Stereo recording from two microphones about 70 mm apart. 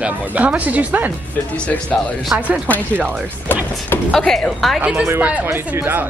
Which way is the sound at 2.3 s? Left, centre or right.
Centre.